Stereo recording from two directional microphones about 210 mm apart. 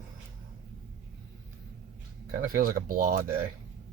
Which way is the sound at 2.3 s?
40° right (ahead or behind).